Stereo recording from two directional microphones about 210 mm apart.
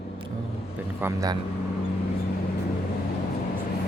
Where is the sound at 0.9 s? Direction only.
15° right (ahead or behind).